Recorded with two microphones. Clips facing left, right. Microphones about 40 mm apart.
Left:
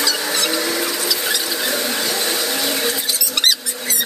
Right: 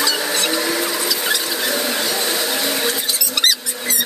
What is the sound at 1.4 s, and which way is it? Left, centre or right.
Squeal, centre.